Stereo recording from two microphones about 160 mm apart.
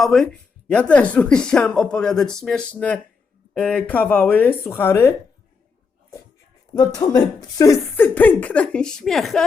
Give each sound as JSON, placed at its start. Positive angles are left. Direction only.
{"t": 0.0, "sound": "speech", "side_deg": 5}
{"t": 6.7, "sound": "speech", "side_deg": 25}